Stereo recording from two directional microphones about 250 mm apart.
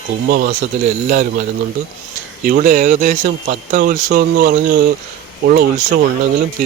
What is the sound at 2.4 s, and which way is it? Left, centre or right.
Speech, right.